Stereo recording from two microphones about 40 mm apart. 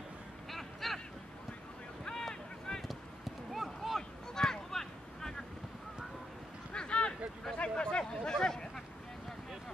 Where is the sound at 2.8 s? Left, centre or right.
Centre.